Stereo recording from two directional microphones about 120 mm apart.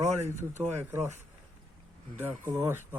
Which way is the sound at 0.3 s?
20° right (ahead or behind).